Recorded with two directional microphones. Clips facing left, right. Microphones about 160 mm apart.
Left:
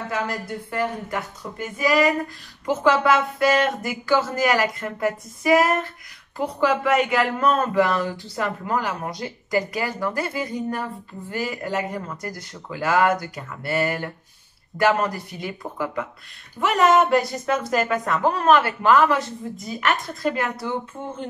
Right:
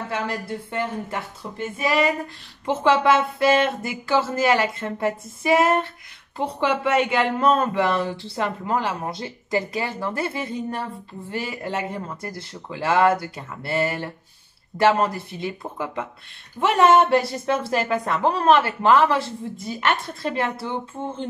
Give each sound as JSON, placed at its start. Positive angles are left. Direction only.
{"t": 0.7, "sound": "speech", "side_deg": -25}